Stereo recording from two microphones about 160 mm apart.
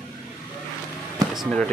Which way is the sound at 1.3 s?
Centre (ahead or behind).